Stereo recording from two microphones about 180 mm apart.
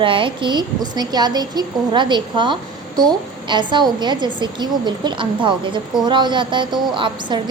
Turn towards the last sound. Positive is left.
turn(degrees=-25)  # may be behind; listen again after turning